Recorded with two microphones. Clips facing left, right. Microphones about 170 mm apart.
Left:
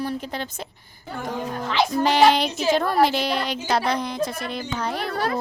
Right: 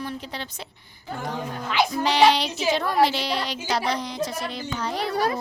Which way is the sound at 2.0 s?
50° left (ahead or behind).